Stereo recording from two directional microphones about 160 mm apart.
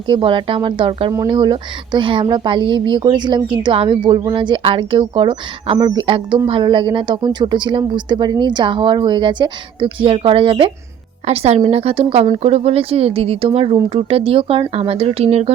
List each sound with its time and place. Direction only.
0.1 s speech: 30° right (ahead or behind)